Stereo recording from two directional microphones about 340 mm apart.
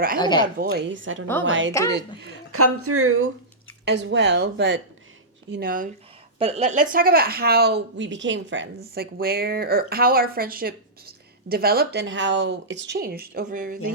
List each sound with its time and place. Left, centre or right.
0.2 s speech: centre
0.6 s a woman's voice: right